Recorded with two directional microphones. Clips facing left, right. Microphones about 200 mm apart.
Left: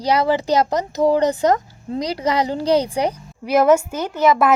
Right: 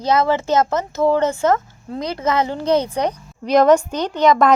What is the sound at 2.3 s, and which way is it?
Speech, 35° left (ahead or behind).